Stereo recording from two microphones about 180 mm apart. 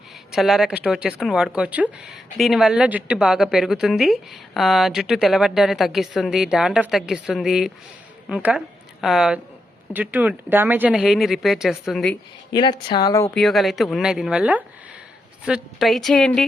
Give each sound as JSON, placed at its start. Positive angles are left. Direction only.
{"t": 0.3, "sound": "a woman's voice", "side_deg": 0}
{"t": 12.5, "sound": "speech", "side_deg": 25}
{"t": 13.3, "sound": "speech", "side_deg": 0}